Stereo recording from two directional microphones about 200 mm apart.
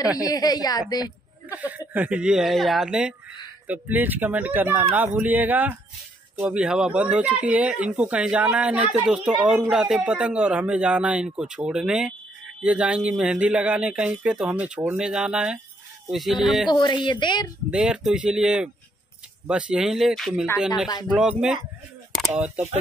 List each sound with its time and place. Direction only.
0.2 s a woman's voice: 20° left (ahead or behind)
1.5 s speech: 10° right (ahead or behind)
16.7 s a woman's voice: 20° left (ahead or behind)
17.6 s speech: 5° right (ahead or behind)